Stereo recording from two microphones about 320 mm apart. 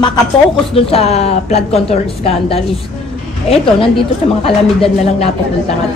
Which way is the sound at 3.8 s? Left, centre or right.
Centre.